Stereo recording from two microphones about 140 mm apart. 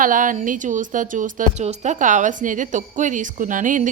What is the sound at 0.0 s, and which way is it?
Speech, 70° right (ahead or behind).